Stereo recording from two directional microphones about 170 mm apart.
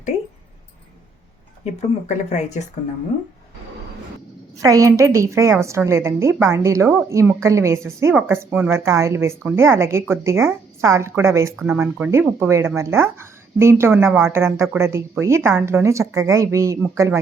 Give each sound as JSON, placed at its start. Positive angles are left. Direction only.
{"t": 1.6, "sound": "speech", "side_deg": 45}
{"t": 4.6, "sound": "a woman's voice", "side_deg": -20}